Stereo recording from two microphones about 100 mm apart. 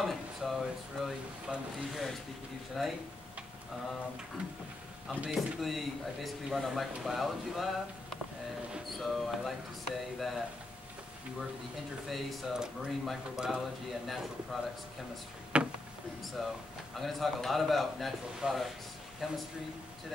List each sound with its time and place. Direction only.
0.0 s speech: centre (ahead or behind)
4.4 s a sound: 10° right (ahead or behind)
5.2 s speech: centre (ahead or behind)
12.1 s speech: centre (ahead or behind)
15.5 s a sound: 10° right (ahead or behind)
16.4 s speech: centre (ahead or behind)